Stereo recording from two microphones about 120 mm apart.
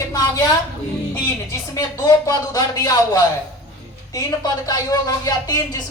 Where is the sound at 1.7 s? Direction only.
30° left (ahead or behind).